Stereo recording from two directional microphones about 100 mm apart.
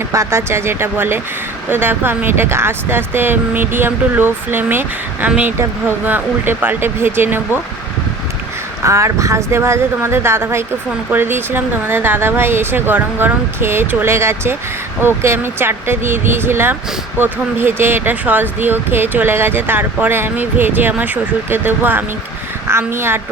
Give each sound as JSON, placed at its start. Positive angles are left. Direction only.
{"t": 0.1, "sound": "speech", "side_deg": -25}
{"t": 8.8, "sound": "speech", "side_deg": -30}